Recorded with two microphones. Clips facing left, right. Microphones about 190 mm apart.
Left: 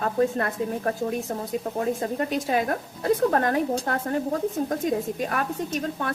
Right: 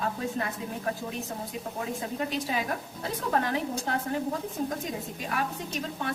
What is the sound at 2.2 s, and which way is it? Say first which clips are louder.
Speech: left 6 dB; 50° left (ahead or behind).